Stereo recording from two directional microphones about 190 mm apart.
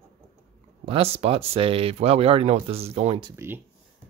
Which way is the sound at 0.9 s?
30° right (ahead or behind).